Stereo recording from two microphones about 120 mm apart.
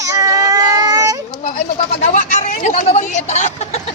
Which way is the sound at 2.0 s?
90° left.